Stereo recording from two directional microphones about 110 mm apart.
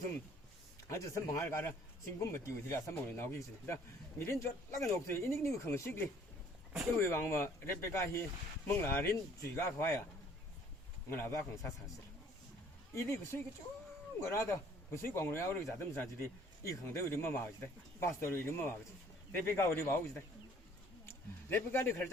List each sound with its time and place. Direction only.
0.9 s speech: 25° left (ahead or behind)
7.0 s speech: 20° left (ahead or behind)
11.1 s speech: 25° left (ahead or behind)
12.9 s speech: 25° left (ahead or behind)